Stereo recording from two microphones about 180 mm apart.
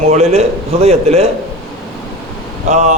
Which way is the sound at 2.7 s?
40° right (ahead or behind).